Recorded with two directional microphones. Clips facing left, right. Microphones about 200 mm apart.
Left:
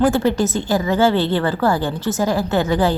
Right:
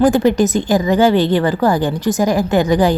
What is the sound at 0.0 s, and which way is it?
A woman's voice, 15° right (ahead or behind).